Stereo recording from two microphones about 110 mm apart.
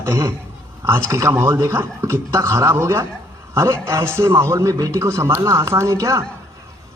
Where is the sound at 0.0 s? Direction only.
25° right (ahead or behind).